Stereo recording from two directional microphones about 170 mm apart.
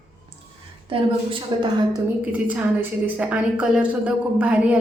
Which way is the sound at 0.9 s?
30° right (ahead or behind).